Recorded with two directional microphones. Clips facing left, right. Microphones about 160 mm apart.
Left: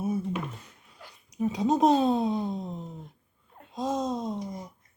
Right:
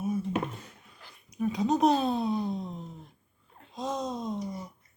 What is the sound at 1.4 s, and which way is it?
Speech, 20° left (ahead or behind).